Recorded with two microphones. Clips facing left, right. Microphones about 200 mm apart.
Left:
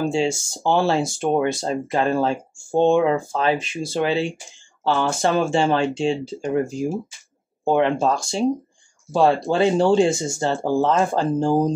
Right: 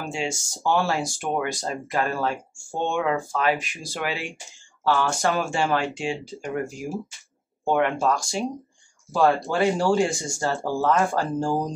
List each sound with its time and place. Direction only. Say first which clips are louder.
0.0 s speech: left 8 dB; 25° left (ahead or behind)